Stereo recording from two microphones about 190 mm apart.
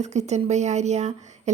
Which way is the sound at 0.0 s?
35° right (ahead or behind).